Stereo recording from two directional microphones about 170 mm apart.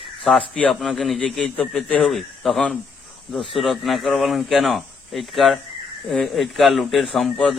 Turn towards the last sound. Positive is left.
turn(degrees=0)  # may be behind; listen again after turning